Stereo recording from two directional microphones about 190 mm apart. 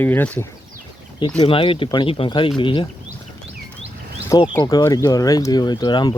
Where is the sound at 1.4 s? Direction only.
30° left (ahead or behind).